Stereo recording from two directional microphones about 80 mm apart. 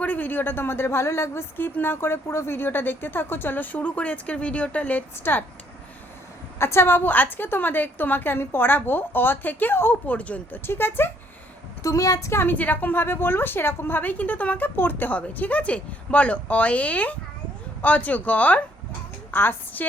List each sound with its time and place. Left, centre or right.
0.0 s a woman's voice: left
6.6 s a woman's voice: left
10.2 s a woman's voice: centre
11.8 s a woman's voice: left
12.5 s a woman's voice: left